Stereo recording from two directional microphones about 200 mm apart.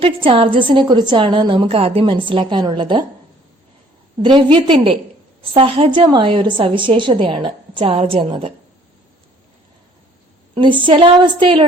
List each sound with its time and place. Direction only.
0.0 s a woman's voice: 25° right (ahead or behind)
4.2 s a woman's voice: 25° right (ahead or behind)
10.5 s a woman's voice: 25° right (ahead or behind)